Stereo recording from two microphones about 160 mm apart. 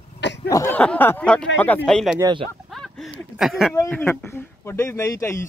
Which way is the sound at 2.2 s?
30° right (ahead or behind).